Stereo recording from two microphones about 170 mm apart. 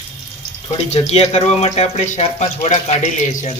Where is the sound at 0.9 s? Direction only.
40° left (ahead or behind).